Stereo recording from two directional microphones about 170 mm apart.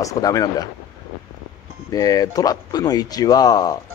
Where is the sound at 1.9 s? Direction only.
20° left (ahead or behind).